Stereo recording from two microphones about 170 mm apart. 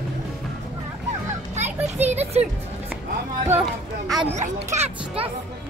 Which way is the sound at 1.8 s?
40° right (ahead or behind).